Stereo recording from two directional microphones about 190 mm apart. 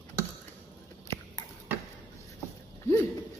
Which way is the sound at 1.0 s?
15° left (ahead or behind).